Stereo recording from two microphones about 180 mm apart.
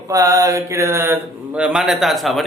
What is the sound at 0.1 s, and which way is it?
Mantra, 20° right (ahead or behind).